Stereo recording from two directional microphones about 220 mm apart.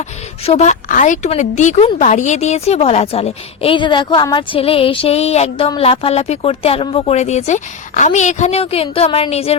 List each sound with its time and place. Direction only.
0.4 s a woman's voice: 30° left (ahead or behind)